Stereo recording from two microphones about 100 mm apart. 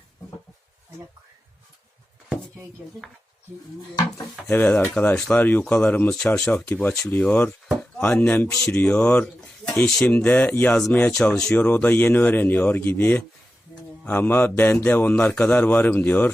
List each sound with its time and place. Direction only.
4.4 s a man's voice: 20° left (ahead or behind)